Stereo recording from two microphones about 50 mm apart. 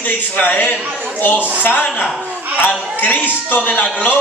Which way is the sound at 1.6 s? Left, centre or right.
Left.